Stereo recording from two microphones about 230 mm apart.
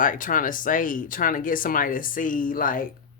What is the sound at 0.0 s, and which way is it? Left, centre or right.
Speech, left.